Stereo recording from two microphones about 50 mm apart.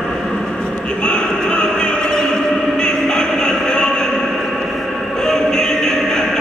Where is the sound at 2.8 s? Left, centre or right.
Centre.